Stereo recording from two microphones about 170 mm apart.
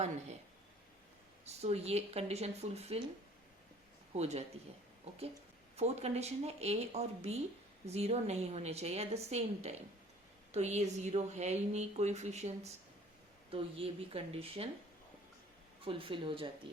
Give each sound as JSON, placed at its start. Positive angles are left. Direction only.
{"t": 1.5, "sound": "speech", "side_deg": -40}
{"t": 4.1, "sound": "speech", "side_deg": -40}
{"t": 5.7, "sound": "speech", "side_deg": -40}
{"t": 15.8, "sound": "speech", "side_deg": -30}